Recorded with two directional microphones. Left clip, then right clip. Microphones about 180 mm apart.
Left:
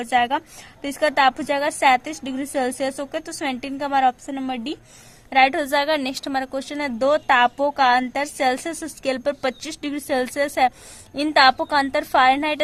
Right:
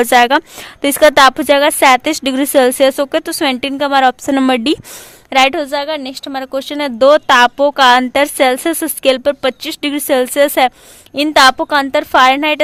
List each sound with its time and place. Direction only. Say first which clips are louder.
0.0 s a woman's voice: right 11 dB; 35° right (ahead or behind)
4.3 s a woman's voice: right 15 dB; 45° right (ahead or behind)
5.3 s a woman's voice: right 5 dB; 20° right (ahead or behind)